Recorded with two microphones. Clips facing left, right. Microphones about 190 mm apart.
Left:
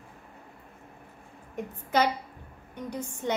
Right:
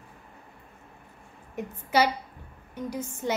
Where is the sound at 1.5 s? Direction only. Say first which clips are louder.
Right 2 dB; 5° right (ahead or behind).